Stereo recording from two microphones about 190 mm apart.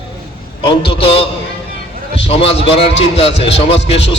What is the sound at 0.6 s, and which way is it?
Speech, 30° left (ahead or behind).